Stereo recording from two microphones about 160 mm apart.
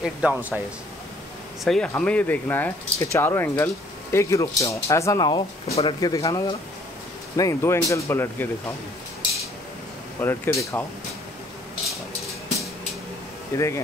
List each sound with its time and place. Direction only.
0.0 s speech: 5° right (ahead or behind)
1.6 s speech: 5° left (ahead or behind)
10.2 s speech: 15° left (ahead or behind)
13.5 s speech: 15° left (ahead or behind)